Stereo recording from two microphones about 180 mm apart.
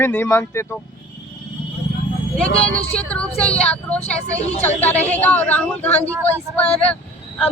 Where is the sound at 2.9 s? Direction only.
5° left (ahead or behind).